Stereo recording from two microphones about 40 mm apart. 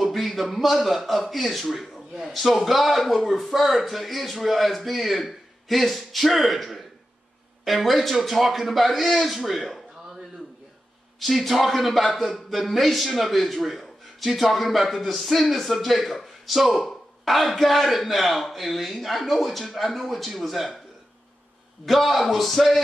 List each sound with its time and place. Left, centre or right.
0.0 s a man's voice: centre
11.1 s a man's voice: centre
21.8 s a man's voice: centre